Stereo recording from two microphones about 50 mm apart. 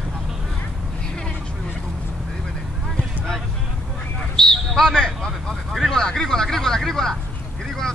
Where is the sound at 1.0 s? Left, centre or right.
Centre.